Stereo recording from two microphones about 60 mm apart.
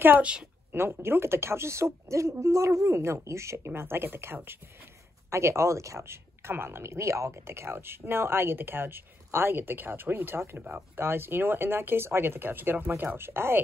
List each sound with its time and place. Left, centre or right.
0.2 s a woman's voice: centre
0.7 s speech: right